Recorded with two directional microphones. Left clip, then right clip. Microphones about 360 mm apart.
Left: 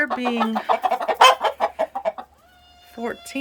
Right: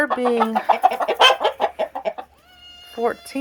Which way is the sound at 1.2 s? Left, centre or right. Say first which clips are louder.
Left 1 dB; left.